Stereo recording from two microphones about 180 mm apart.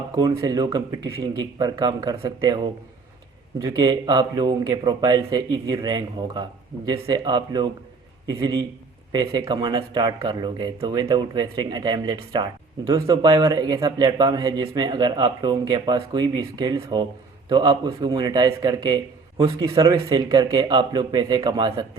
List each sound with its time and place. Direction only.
0.2 s speech: 20° right (ahead or behind)
3.6 s speech: 20° right (ahead or behind)
9.1 s speech: 20° right (ahead or behind)